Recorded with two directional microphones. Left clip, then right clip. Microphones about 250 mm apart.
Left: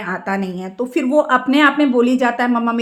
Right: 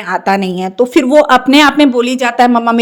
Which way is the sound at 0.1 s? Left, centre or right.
Right.